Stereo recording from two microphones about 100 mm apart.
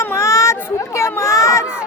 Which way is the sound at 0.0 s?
25° left (ahead or behind).